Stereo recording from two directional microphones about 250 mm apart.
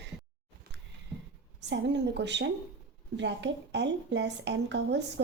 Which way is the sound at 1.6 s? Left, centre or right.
Right.